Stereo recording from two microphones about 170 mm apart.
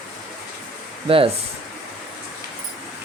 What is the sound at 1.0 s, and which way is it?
Speech, 35° right (ahead or behind).